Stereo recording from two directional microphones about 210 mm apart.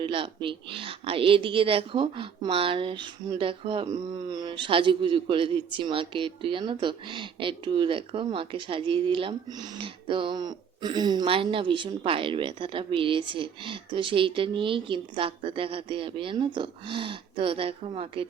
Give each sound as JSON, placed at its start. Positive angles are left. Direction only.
{"t": 0.0, "sound": "a woman's voice", "side_deg": -25}